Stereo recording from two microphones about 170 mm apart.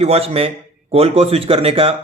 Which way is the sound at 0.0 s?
35° right (ahead or behind).